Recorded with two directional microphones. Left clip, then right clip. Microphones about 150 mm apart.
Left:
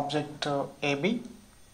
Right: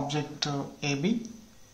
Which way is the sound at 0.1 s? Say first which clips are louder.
Left 2 dB; 40° left (ahead or behind).